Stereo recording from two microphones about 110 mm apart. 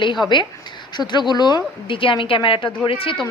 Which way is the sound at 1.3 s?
40° left (ahead or behind).